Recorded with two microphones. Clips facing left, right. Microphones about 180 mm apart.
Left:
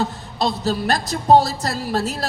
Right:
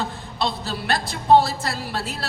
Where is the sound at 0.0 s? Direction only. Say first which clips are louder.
Left 4 dB; 40° left (ahead or behind).